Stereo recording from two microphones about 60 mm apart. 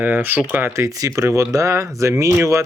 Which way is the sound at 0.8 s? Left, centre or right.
Right.